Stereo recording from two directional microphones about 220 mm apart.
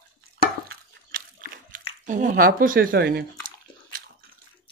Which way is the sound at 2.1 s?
35° right (ahead or behind).